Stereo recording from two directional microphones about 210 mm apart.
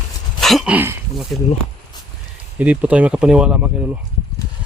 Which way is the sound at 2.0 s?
20° left (ahead or behind).